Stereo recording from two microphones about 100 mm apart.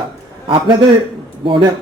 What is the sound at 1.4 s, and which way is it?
Speech, 60° right (ahead or behind).